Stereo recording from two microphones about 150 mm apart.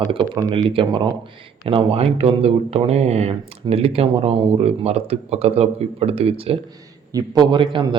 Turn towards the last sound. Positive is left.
turn(degrees=-35)  # may be behind; listen again after turning